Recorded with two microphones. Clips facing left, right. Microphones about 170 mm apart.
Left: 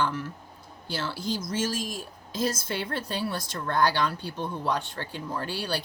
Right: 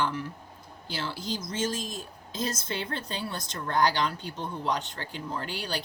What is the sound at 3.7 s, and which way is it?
Speech, 15° right (ahead or behind).